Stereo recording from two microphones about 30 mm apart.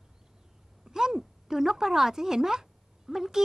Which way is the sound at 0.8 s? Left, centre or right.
Centre.